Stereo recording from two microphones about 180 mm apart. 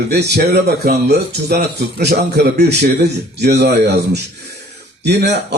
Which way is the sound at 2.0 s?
65° right (ahead or behind).